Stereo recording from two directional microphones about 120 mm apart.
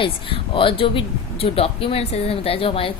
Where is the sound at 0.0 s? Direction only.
45° left (ahead or behind).